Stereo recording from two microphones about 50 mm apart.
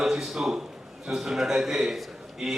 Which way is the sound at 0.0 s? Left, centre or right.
Centre.